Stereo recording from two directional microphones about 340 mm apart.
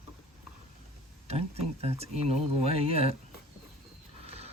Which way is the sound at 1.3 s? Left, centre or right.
Centre.